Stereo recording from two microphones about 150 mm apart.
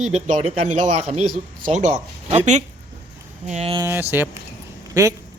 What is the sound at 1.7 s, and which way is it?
Speech, 50° right (ahead or behind).